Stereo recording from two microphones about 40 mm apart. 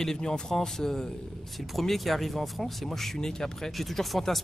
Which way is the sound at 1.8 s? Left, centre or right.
Centre.